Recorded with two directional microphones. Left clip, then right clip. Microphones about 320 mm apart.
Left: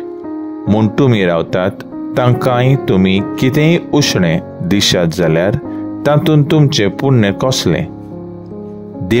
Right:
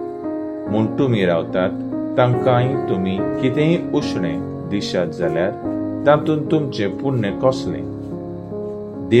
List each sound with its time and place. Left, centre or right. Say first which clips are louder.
0.7 s speech: left 6 dB; left
9.1 s speech: left 1 dB; left